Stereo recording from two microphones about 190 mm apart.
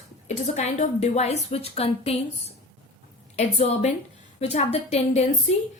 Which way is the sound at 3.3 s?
35° left (ahead or behind).